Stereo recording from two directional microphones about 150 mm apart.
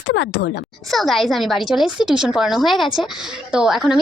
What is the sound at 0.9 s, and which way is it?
A woman's voice, centre (ahead or behind).